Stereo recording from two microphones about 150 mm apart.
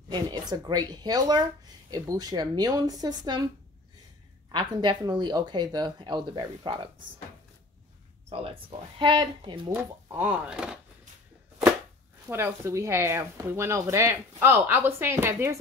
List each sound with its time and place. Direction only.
0.1 s speech: 25° right (ahead or behind)
4.5 s speech: 30° right (ahead or behind)
8.3 s speech: 35° right (ahead or behind)
9.8 s speech: 10° right (ahead or behind)
12.3 s speech: 15° right (ahead or behind)